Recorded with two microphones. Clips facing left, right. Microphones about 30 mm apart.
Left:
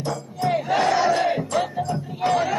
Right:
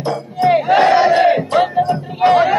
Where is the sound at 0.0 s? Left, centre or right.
Right.